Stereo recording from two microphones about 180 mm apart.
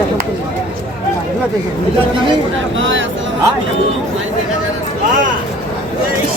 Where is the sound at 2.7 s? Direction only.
90° right.